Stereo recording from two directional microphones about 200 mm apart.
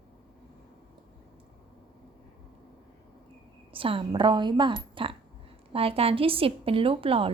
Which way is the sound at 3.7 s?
25° right (ahead or behind).